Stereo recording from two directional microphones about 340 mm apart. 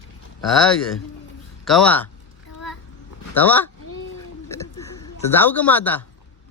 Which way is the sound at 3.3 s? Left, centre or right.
Centre.